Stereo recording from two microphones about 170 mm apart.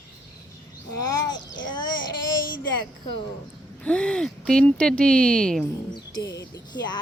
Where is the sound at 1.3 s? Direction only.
90° left.